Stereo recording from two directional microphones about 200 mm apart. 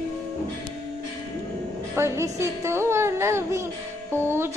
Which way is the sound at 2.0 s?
15° right (ahead or behind).